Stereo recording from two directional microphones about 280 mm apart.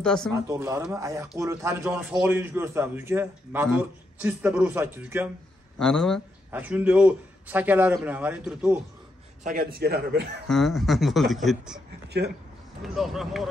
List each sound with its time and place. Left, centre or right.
0.0 s a man's voice: centre
0.5 s a man's voice: centre
9.4 s a man's voice: right
10.4 s a man's voice: centre
12.8 s a man's voice: centre